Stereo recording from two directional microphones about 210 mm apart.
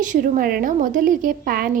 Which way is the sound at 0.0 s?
40° right (ahead or behind).